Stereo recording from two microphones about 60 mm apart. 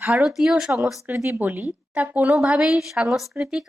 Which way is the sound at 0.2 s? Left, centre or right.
Centre.